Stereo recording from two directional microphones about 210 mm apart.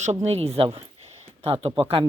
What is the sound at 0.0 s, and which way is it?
Speech, 35° right (ahead or behind).